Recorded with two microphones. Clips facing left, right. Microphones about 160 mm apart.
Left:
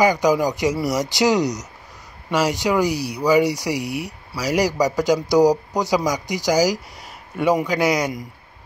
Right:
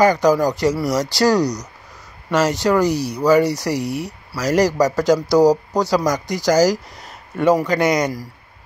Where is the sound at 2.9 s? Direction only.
45° right (ahead or behind).